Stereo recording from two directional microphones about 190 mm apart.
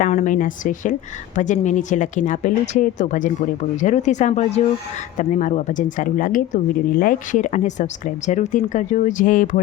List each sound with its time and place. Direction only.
0.0 s speech: 40° left (ahead or behind)